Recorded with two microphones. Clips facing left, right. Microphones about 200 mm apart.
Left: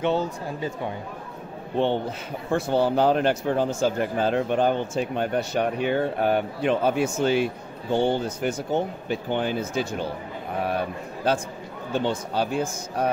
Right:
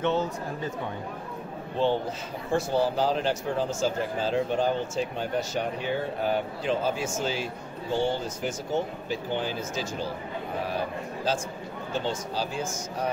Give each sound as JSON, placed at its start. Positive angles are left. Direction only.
{"t": 0.0, "sound": "speech", "side_deg": 10}
{"t": 2.5, "sound": "speech", "side_deg": 60}
{"t": 11.3, "sound": "speech", "side_deg": 60}